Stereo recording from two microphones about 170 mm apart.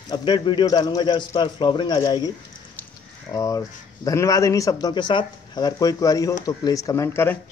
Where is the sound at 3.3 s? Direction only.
20° left (ahead or behind).